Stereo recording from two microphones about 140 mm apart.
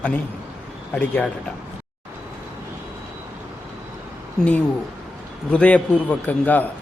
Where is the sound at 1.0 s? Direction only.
10° left (ahead or behind).